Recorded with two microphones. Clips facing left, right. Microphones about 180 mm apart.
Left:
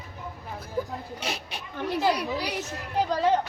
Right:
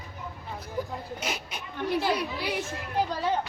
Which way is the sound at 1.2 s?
35° left (ahead or behind).